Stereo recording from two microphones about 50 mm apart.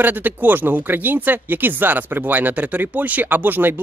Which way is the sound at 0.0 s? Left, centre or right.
Right.